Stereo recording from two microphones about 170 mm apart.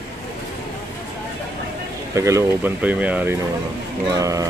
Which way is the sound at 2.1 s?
15° right (ahead or behind).